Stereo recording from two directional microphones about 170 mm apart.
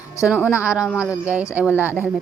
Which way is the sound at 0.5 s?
5° right (ahead or behind).